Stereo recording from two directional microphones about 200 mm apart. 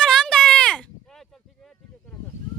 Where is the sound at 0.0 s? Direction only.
5° left (ahead or behind).